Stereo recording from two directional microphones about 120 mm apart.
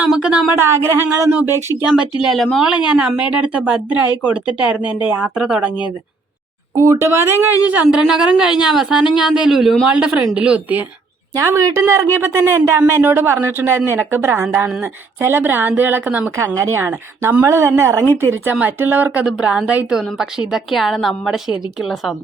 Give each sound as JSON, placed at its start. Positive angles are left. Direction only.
{"t": 0.0, "sound": "a sound", "side_deg": -10}
{"t": 0.6, "sound": "speech", "side_deg": -20}
{"t": 1.9, "sound": "speech", "side_deg": -5}
{"t": 6.7, "sound": "speech", "side_deg": -30}
{"t": 11.3, "sound": "a woman's voice", "side_deg": -25}